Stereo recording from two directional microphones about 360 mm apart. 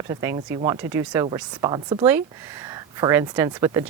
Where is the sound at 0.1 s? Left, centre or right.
Centre.